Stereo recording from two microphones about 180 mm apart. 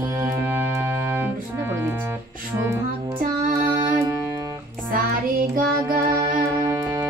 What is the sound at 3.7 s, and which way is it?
Music, 20° right (ahead or behind).